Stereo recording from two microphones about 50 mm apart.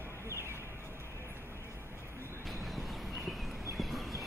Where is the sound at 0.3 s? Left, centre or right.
Right.